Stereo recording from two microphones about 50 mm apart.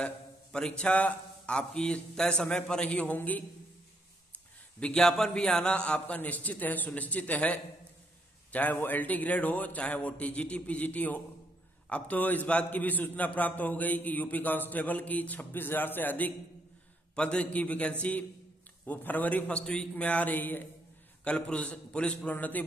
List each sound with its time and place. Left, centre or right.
0.5 s a man's voice: centre
4.7 s a man's voice: centre; by 16.3 s left
17.1 s a man's voice: left
19.6 s a man's voice: centre
20.0 s a man's voice: left
21.2 s a man's voice: left